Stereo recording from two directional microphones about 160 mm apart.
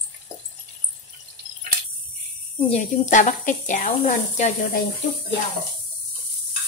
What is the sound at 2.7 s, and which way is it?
Speech, 50° left (ahead or behind).